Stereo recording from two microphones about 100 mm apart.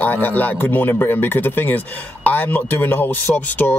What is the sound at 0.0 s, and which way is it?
Speech, 20° left (ahead or behind).